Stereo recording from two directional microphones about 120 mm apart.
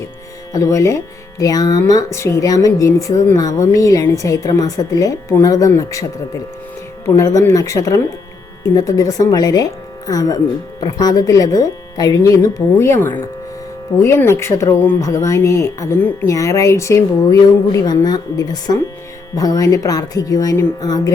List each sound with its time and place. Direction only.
0.5 s speech: 25° left (ahead or behind)
14.0 s speech: 20° left (ahead or behind)